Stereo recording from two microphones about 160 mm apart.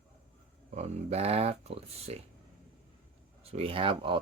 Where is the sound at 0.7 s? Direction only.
40° right (ahead or behind).